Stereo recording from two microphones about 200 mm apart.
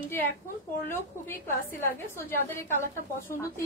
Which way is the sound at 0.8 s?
10° left (ahead or behind).